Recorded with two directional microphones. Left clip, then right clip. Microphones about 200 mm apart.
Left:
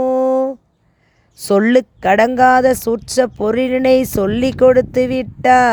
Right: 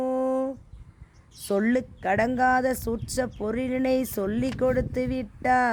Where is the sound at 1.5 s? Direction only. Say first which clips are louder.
Left 13 dB; 40° left (ahead or behind).